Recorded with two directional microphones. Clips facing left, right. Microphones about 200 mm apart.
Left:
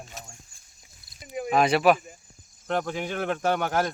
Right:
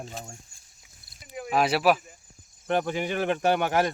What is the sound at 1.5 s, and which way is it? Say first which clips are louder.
Speech: left 2 dB; 5° right (ahead or behind).